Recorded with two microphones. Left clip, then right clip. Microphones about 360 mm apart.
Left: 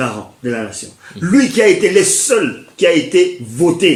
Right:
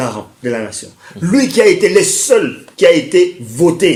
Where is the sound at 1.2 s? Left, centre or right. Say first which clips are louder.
Right 1 dB; centre.